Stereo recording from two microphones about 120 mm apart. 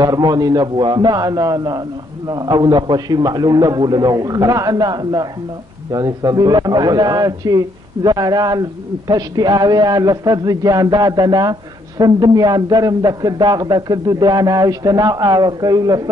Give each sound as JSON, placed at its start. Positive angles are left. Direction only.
{"t": 0.0, "sound": "a man's voice", "side_deg": -35}